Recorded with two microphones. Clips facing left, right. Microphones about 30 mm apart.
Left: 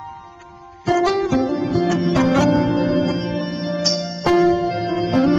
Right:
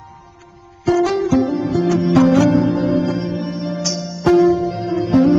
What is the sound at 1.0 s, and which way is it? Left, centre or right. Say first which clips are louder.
Music: right 2 dB; left.